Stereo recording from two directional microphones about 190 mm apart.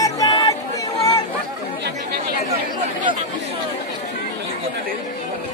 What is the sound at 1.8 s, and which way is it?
Chatter, 60° right (ahead or behind).